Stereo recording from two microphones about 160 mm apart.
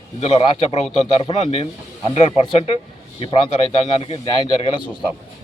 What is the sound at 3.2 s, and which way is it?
Speech, 35° left (ahead or behind).